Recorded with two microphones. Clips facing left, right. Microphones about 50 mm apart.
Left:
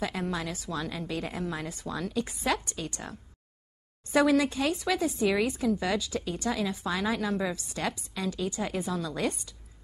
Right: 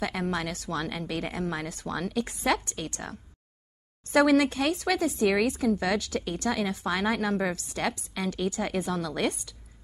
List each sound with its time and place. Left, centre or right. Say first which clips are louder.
0.3 s a woman's voice: right 2 dB; right
4.6 s speech: right 2 dB; right
7.0 s a woman's voice: right 2 dB; right
8.9 s speech: right 2 dB; right